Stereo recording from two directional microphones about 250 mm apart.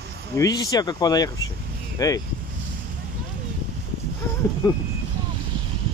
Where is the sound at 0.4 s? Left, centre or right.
Centre.